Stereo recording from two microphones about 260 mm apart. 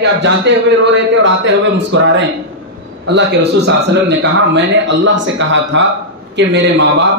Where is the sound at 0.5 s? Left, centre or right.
Right.